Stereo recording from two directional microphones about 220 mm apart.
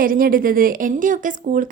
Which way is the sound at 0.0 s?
40° right (ahead or behind).